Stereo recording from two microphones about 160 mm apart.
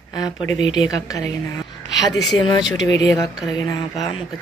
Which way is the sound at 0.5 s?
45° right (ahead or behind).